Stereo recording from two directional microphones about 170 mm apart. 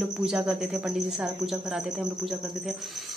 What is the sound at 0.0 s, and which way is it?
A woman's voice, 5° right (ahead or behind).